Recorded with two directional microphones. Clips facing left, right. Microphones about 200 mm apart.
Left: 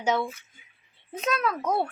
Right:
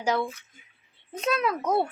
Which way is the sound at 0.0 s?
Centre (ahead or behind).